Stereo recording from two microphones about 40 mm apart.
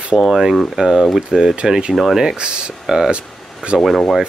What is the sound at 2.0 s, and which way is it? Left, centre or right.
Speech, centre.